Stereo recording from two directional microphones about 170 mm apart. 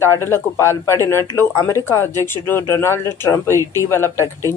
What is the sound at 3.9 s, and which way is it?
Speech, 15° left (ahead or behind).